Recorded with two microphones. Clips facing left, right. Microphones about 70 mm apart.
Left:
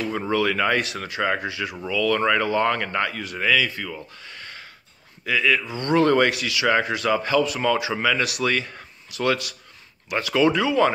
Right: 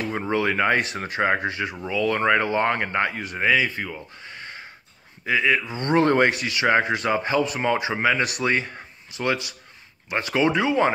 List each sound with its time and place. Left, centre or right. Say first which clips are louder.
0.0 s speech: left 1 dB; right